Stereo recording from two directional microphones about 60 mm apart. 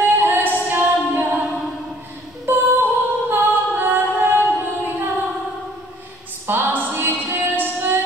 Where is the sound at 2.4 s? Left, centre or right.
Right.